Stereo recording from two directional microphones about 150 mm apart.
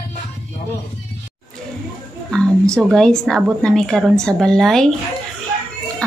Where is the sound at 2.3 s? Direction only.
5° left (ahead or behind).